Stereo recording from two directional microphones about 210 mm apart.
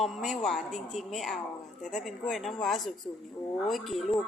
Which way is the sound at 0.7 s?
35° left (ahead or behind).